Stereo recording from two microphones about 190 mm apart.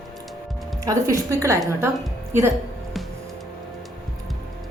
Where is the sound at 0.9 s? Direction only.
15° right (ahead or behind).